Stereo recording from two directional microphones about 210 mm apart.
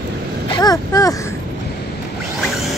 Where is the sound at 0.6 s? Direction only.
15° left (ahead or behind).